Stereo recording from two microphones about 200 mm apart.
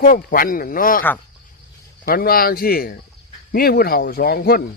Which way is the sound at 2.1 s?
50° left (ahead or behind).